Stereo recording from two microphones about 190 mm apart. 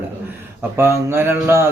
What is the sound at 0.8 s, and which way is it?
Speech, 10° right (ahead or behind).